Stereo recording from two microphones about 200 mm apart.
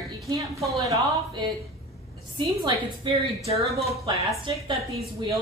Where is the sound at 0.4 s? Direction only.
15° right (ahead or behind).